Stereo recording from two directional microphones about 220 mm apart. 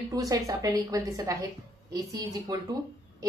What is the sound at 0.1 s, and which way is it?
Speech, 15° right (ahead or behind).